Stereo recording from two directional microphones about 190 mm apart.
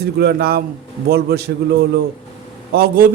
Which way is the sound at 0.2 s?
55° right (ahead or behind).